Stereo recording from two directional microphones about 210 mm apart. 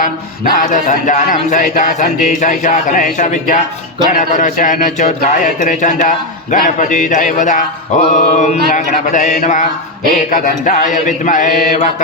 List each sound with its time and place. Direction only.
0.5 s a man's voice: 40° left (ahead or behind)